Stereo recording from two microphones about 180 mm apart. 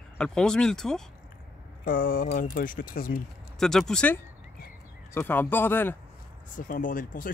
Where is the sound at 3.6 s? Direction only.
Centre (ahead or behind).